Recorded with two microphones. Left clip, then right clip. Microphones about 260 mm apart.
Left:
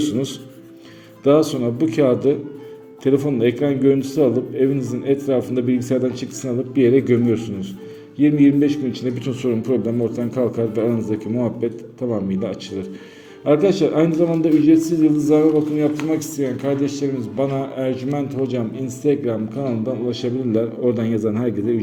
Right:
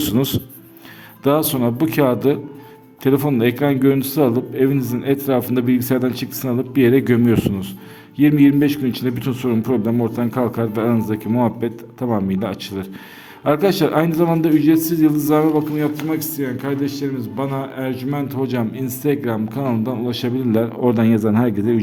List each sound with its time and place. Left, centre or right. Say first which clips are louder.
0.0 s a man's voice: right 2 dB; right